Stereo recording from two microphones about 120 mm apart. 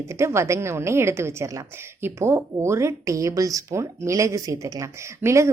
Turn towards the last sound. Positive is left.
turn(degrees=-25)  # may be behind; listen again after turning